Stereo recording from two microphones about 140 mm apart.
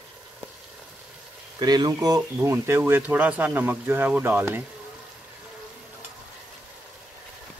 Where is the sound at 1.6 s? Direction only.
30° right (ahead or behind).